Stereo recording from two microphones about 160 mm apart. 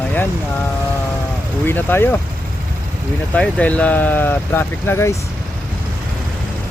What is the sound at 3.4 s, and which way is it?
Speech, 10° left (ahead or behind).